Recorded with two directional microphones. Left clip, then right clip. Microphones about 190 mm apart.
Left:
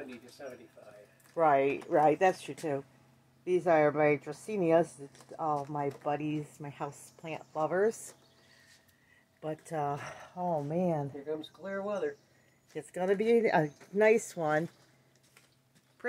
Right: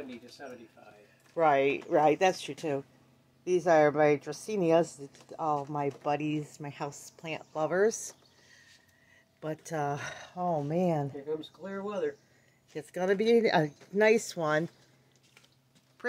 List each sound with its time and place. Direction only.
1.3 s speech: 10° right (ahead or behind)
9.4 s speech: 20° right (ahead or behind)
11.2 s speech: 40° right (ahead or behind)
12.7 s speech: 15° right (ahead or behind)